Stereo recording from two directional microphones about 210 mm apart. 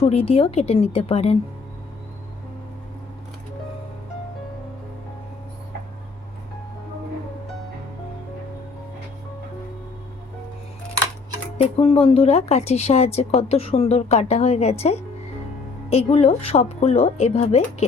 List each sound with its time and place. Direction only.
0.0 s a woman's voice: 30° left (ahead or behind)
11.5 s a woman's voice: 25° left (ahead or behind)